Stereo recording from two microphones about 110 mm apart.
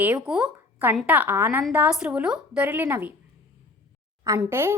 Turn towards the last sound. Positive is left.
turn(degrees=-25)  # may be behind; listen again after turning